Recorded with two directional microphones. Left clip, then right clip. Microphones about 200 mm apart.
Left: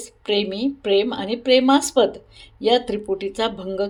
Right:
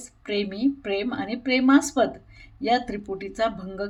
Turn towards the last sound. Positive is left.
turn(degrees=5)  # may be behind; listen again after turning